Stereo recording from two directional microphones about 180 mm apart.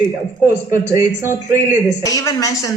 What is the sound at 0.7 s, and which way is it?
Speech, 15° right (ahead or behind).